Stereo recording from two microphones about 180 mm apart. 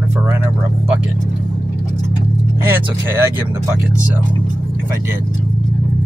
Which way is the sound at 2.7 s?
15° right (ahead or behind).